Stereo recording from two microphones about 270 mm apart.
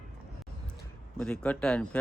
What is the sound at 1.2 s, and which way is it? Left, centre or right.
Speech, centre.